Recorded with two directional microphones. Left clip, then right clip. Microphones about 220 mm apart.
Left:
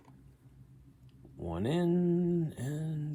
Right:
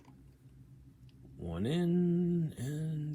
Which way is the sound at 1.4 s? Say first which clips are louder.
Left 3 dB; 40° left (ahead or behind).